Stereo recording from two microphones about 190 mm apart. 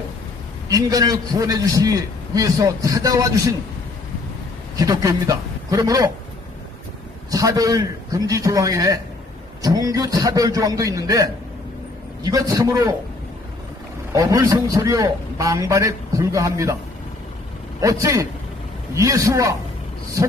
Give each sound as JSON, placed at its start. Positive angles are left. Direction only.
{"t": 0.7, "sound": "a man's voice", "side_deg": -20}
{"t": 4.7, "sound": "a man's voice", "side_deg": -20}
{"t": 7.2, "sound": "a man's voice", "side_deg": -20}
{"t": 14.1, "sound": "a man's voice", "side_deg": -15}
{"t": 17.7, "sound": "a man's voice", "side_deg": -15}